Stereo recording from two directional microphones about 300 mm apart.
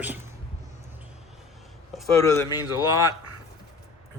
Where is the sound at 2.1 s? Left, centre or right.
Centre.